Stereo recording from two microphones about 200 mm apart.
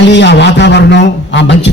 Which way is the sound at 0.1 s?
60° left (ahead or behind).